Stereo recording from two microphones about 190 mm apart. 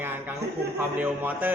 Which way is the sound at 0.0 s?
10° right (ahead or behind).